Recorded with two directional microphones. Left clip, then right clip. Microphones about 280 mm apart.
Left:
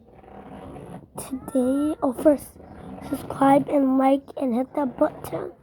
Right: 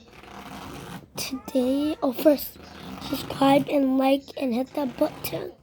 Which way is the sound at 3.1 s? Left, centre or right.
Centre.